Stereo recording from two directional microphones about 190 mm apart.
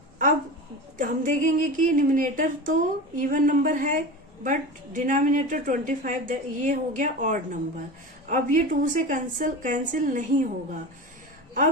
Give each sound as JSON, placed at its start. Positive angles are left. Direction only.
{"t": 0.9, "sound": "a woman's voice", "side_deg": -45}